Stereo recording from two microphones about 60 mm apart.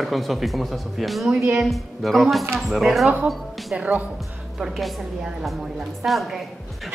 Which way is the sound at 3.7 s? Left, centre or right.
Right.